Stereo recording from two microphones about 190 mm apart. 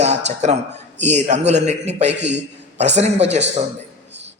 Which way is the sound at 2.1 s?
65° right (ahead or behind).